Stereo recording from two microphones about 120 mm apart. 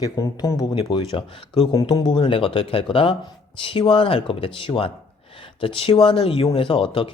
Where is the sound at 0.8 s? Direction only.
45° left (ahead or behind).